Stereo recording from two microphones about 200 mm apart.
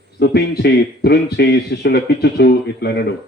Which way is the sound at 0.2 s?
55° left (ahead or behind).